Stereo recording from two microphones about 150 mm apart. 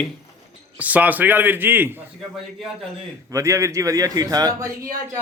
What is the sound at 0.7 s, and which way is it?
Speech, 10° right (ahead or behind).